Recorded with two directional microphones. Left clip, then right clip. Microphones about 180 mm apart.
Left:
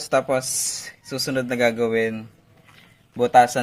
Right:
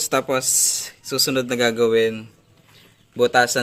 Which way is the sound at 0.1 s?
30° right (ahead or behind).